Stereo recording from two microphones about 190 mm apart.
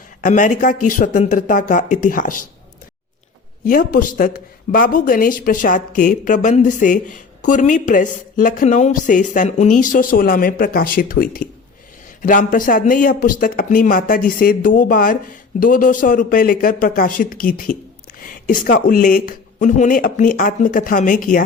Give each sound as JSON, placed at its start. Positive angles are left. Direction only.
{"t": 0.2, "sound": "speech", "side_deg": 45}
{"t": 3.6, "sound": "speech", "side_deg": 45}